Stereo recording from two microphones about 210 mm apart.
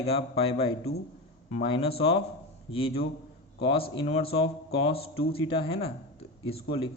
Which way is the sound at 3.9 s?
25° left (ahead or behind).